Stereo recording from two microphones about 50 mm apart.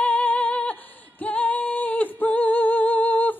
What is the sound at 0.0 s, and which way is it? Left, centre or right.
Singing, left.